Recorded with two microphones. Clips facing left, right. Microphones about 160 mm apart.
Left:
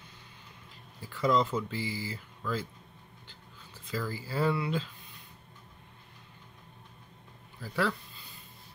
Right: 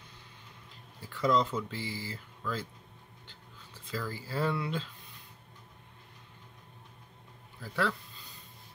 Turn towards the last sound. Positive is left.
turn(degrees=5)  # may be behind; listen again after turning